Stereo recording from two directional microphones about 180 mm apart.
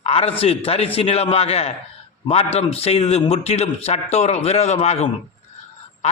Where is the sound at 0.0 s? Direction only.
35° left (ahead or behind).